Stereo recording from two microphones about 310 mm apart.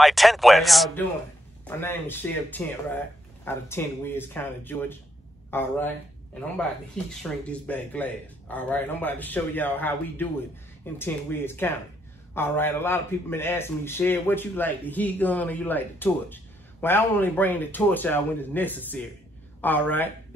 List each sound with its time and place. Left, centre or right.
0.0 s a man's voice: centre
7.0 s a man's voice: centre